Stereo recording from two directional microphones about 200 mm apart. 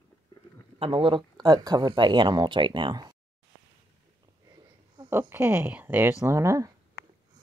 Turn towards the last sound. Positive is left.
turn(degrees=-15)  # may be behind; listen again after turning